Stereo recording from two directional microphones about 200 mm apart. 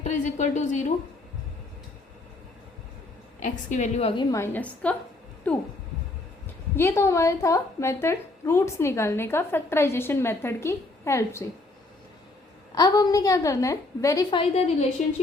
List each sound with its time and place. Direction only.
0.0 s a woman's voice: 35° left (ahead or behind)
3.7 s a woman's voice: 35° left (ahead or behind); by 5.6 s 5° left (ahead or behind)
6.7 s a woman's voice: 15° left (ahead or behind)
12.7 s a woman's voice: 20° left (ahead or behind)